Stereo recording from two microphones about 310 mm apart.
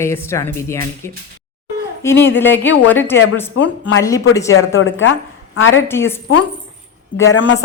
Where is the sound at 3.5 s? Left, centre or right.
Left.